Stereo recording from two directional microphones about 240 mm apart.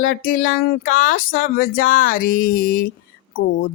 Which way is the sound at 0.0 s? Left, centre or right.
Left.